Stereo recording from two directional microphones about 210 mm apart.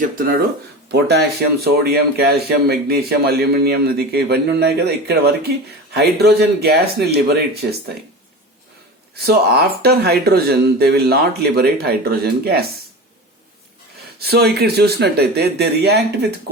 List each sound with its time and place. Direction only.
0.0 s speech: 40° right (ahead or behind)
0.9 s speech: 55° right (ahead or behind)
9.1 s speech: 50° right (ahead or behind)
14.2 s speech: 50° right (ahead or behind)